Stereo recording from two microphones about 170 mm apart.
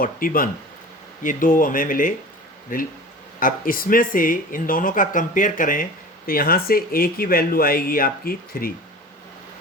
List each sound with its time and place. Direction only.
0.0 s speech: 55° left (ahead or behind)